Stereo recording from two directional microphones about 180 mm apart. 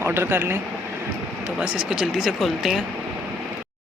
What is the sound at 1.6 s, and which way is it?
Speech, 5° right (ahead or behind).